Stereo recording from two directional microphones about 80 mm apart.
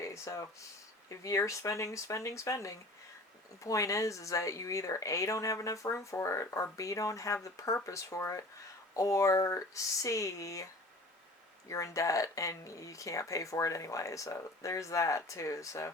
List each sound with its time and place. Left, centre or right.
0.0 s speech: left
11.7 s speech: left